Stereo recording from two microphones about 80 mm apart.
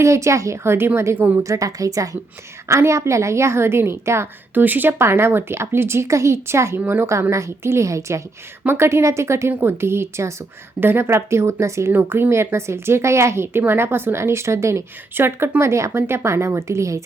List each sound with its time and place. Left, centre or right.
0.0 s speech: right
1.5 s a woman's voice: right
4.5 s speech: right